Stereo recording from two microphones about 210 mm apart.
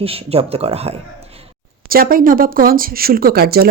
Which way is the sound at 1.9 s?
45° right (ahead or behind).